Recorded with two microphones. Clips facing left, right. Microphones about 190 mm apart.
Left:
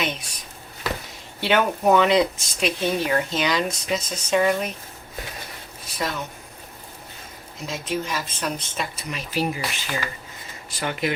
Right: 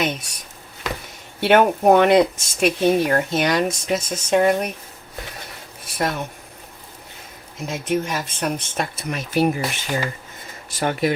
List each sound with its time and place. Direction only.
1.4 s speech: 55° right (ahead or behind)
6.0 s speech: 55° right (ahead or behind)
7.7 s speech: 55° right (ahead or behind)